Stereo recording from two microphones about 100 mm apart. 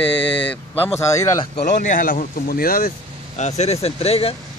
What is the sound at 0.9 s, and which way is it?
Speech, 30° left (ahead or behind).